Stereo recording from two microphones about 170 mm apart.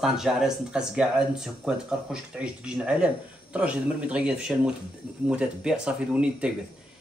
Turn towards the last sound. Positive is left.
turn(degrees=-5)  # may be behind; listen again after turning